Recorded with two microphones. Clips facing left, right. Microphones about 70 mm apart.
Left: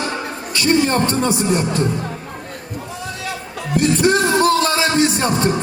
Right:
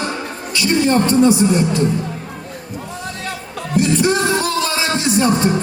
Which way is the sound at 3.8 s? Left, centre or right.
Left.